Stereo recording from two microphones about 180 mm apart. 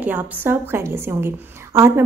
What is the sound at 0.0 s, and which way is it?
A woman's voice, 10° right (ahead or behind).